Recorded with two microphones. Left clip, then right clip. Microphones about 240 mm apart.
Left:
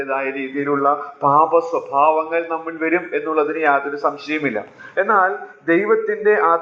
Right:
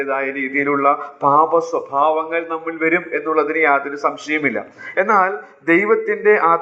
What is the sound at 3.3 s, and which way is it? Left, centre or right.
A man's voice, right.